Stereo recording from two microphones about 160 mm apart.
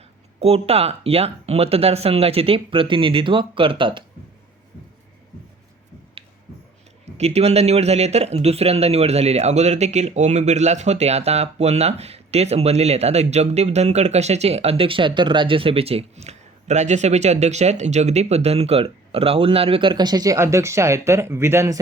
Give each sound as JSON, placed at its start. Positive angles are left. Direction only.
{"t": 0.3, "sound": "speech", "side_deg": -40}
{"t": 7.2, "sound": "speech", "side_deg": -40}